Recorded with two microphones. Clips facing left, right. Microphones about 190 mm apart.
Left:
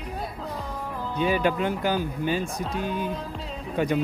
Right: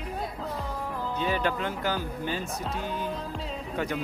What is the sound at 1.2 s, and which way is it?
Speech, 15° left (ahead or behind).